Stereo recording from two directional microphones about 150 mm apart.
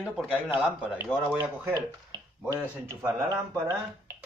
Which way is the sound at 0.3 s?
10° right (ahead or behind).